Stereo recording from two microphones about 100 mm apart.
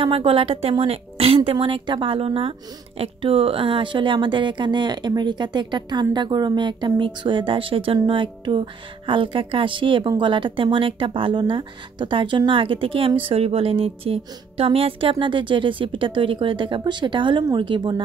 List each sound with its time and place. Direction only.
0.0 s speech: 60° right (ahead or behind)